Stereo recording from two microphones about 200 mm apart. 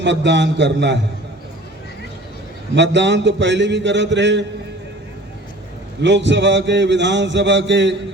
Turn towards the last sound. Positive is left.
turn(degrees=-65)  # may be behind; listen again after turning